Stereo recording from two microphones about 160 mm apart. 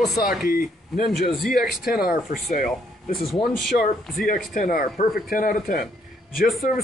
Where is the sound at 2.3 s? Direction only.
60° left (ahead or behind).